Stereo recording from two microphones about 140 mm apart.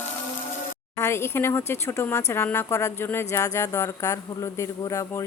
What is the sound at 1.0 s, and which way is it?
Speech, 20° left (ahead or behind).